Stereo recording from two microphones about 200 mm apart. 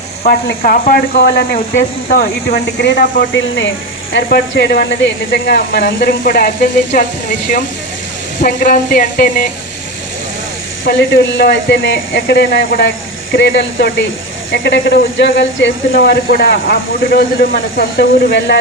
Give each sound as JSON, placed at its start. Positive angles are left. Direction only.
{"t": 0.3, "sound": "speech", "side_deg": 45}
{"t": 4.1, "sound": "speech", "side_deg": 55}
{"t": 10.8, "sound": "speech", "side_deg": 55}
{"t": 18.3, "sound": "speech", "side_deg": 60}